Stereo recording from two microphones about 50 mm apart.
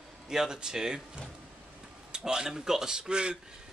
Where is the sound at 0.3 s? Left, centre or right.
Centre.